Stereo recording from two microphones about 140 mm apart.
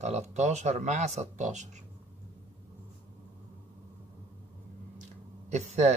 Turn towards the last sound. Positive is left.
turn(degrees=-55)  # may be behind; listen again after turning